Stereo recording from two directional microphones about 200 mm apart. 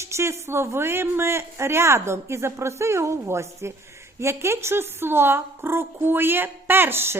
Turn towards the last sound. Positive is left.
turn(degrees=-10)  # may be behind; listen again after turning